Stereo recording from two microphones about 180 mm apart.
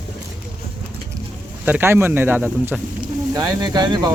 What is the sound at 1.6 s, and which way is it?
Speech, 10° right (ahead or behind).